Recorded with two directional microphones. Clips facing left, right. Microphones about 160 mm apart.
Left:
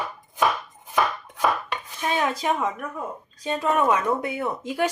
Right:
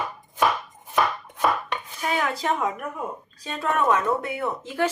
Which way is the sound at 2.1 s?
25° left (ahead or behind).